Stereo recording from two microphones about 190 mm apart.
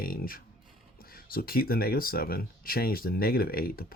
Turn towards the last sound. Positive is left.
turn(degrees=50)  # may be behind; listen again after turning